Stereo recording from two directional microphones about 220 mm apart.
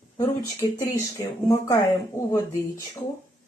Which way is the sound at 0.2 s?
15° left (ahead or behind).